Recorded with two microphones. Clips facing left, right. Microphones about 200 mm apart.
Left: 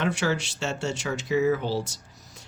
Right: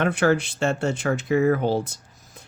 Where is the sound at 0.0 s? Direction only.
55° right (ahead or behind).